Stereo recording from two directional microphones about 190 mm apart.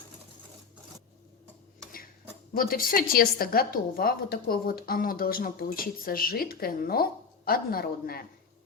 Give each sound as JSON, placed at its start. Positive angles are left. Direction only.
{"t": 2.5, "sound": "a woman's voice", "side_deg": 50}